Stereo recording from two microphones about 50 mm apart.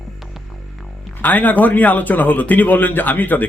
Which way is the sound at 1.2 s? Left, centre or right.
Left.